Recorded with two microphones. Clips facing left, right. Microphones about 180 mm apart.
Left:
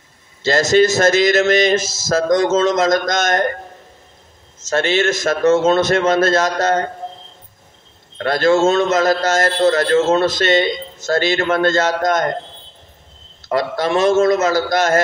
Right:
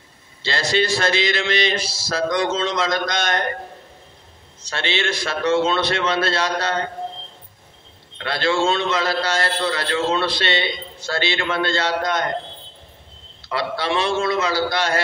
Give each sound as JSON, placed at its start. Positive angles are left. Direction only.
{"t": 0.4, "sound": "a man's voice", "side_deg": 45}
{"t": 4.6, "sound": "a man's voice", "side_deg": 45}
{"t": 8.2, "sound": "a man's voice", "side_deg": 45}
{"t": 13.5, "sound": "a man's voice", "side_deg": 45}